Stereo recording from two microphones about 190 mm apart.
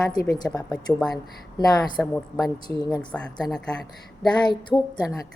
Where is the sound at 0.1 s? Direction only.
20° left (ahead or behind).